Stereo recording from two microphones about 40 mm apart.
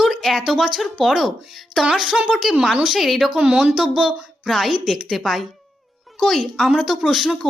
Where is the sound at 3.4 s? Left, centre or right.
Right.